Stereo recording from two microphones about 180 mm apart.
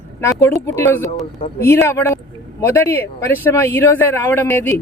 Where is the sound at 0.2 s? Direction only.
15° left (ahead or behind).